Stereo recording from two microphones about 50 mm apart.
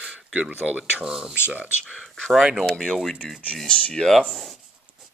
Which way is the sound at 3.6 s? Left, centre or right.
Left.